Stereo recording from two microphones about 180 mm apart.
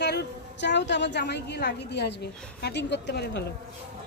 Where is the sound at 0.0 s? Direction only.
70° left (ahead or behind).